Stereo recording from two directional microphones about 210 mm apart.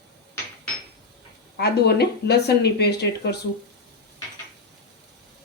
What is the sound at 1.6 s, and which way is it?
Speech, 50° left (ahead or behind).